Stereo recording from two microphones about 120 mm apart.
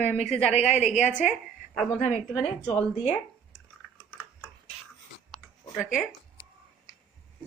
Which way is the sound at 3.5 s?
25° left (ahead or behind).